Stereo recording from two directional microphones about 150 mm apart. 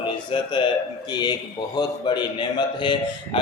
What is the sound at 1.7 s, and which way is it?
A man's voice, 30° left (ahead or behind).